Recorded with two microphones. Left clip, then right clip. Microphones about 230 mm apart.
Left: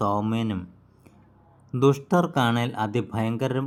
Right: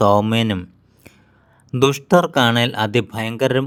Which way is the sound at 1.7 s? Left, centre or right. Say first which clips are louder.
Right 6 dB; right.